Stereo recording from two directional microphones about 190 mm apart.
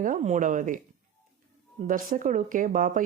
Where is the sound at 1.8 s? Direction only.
45° right (ahead or behind).